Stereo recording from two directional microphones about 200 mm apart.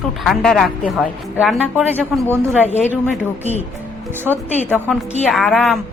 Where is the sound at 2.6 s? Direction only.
35° left (ahead or behind).